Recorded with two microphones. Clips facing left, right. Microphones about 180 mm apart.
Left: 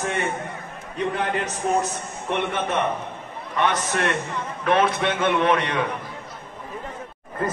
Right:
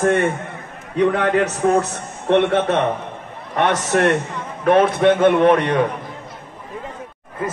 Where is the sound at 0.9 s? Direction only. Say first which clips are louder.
Right 8 dB; 65° right (ahead or behind).